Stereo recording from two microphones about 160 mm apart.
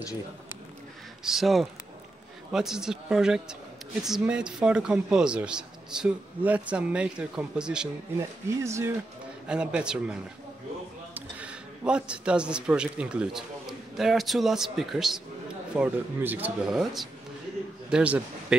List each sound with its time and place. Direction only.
1.2 s a man's voice: centre (ahead or behind)
8.2 s speech: 20° right (ahead or behind)
9.5 s a man's voice: 5° right (ahead or behind)